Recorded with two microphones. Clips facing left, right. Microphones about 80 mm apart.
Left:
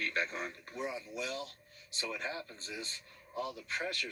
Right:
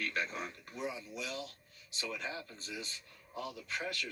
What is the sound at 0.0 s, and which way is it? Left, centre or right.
Speech, left.